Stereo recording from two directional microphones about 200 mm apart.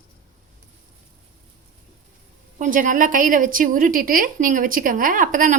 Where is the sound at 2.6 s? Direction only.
40° right (ahead or behind).